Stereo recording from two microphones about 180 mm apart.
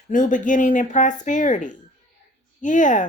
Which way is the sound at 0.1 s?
45° left (ahead or behind).